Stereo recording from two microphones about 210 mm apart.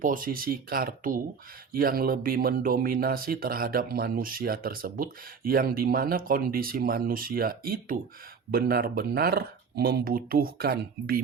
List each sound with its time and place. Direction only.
0.0 s speech: 40° right (ahead or behind)